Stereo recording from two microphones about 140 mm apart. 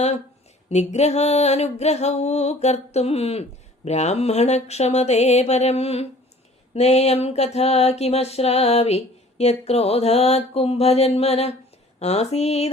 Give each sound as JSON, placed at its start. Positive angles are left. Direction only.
{"t": 0.7, "sound": "music", "side_deg": 55}